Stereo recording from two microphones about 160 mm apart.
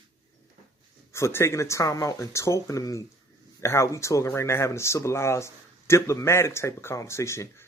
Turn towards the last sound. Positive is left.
turn(degrees=15)  # may be behind; listen again after turning